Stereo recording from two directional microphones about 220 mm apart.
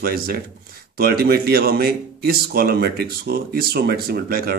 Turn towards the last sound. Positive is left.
turn(degrees=-45)  # may be behind; listen again after turning